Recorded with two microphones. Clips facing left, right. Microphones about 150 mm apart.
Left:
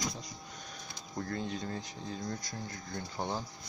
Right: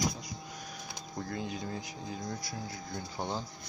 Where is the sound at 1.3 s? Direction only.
10° right (ahead or behind).